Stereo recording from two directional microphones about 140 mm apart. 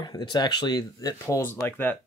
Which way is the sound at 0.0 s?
30° left (ahead or behind).